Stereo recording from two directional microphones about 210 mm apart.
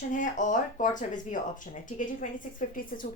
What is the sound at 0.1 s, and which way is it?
A woman's voice, 35° left (ahead or behind).